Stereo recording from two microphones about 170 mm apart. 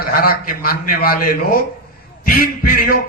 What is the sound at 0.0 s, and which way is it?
A man's voice, 60° left (ahead or behind).